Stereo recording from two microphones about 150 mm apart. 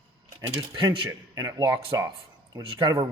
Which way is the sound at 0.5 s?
25° right (ahead or behind).